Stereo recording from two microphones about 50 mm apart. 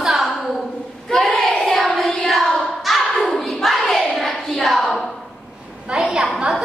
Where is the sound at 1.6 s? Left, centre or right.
Centre.